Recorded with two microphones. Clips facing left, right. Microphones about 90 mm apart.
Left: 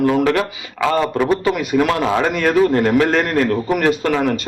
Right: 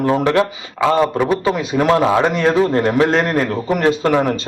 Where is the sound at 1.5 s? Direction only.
30° right (ahead or behind).